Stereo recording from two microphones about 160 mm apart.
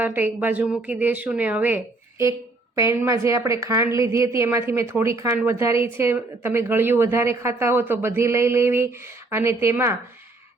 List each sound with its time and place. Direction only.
0.0 s a woman's voice: 10° right (ahead or behind)